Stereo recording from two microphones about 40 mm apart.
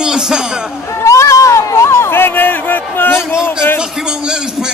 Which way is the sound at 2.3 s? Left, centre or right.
Left.